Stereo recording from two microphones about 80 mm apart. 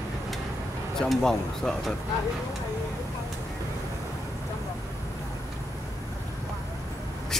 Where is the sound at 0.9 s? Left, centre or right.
Centre.